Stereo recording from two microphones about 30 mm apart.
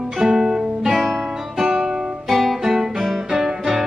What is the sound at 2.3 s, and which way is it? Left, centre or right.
Guitar, centre.